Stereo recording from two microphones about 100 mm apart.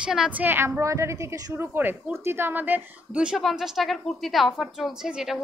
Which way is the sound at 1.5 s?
20° right (ahead or behind).